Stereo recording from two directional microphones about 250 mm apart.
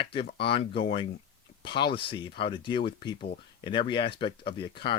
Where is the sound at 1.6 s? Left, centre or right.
Centre.